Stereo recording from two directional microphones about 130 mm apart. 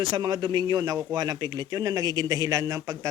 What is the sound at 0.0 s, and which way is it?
Speech, 35° right (ahead or behind).